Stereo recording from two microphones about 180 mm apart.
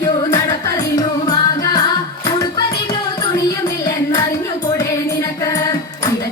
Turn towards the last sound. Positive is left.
turn(degrees=20)  # may be behind; listen again after turning